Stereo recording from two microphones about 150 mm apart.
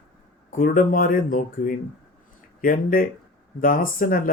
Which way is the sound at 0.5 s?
65° left (ahead or behind).